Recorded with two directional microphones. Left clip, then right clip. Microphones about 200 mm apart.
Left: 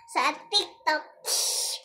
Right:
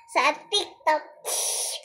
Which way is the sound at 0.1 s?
45° left (ahead or behind).